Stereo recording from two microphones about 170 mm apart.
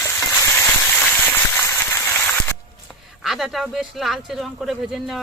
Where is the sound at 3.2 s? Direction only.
Centre (ahead or behind).